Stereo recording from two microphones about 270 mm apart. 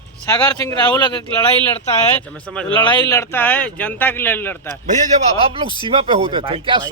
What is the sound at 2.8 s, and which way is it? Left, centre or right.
Speech, centre.